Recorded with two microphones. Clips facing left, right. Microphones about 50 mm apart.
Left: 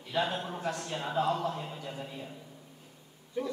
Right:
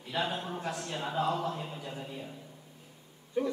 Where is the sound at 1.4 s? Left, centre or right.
Centre.